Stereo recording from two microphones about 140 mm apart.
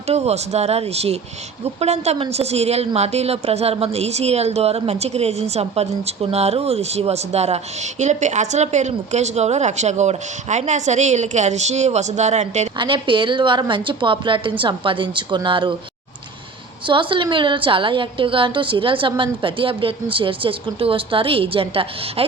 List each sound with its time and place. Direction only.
0.1 s a woman's voice: 50° right (ahead or behind)
12.7 s a woman's voice: 35° right (ahead or behind)
16.8 s a woman's voice: 35° right (ahead or behind)